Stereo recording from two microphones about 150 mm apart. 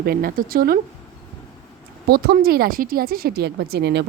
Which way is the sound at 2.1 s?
90° right.